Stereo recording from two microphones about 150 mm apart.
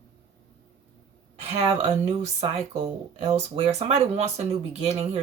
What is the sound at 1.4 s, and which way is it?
Speech, 45° right (ahead or behind).